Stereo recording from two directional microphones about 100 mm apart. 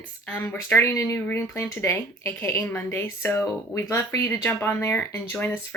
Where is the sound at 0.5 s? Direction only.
25° left (ahead or behind).